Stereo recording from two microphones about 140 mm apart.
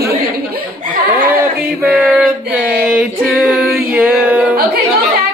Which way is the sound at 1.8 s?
5° right (ahead or behind).